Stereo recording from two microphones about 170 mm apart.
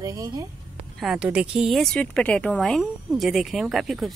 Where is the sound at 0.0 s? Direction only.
20° right (ahead or behind).